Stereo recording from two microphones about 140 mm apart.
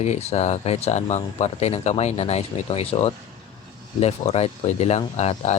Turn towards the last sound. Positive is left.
turn(degrees=50)  # may be behind; listen again after turning